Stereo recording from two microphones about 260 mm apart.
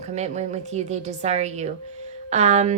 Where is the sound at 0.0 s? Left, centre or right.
Right.